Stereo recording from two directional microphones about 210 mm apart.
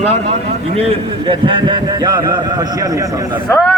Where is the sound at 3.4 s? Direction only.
5° left (ahead or behind).